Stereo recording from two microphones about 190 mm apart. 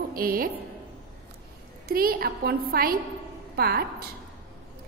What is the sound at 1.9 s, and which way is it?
A woman's voice, 55° right (ahead or behind).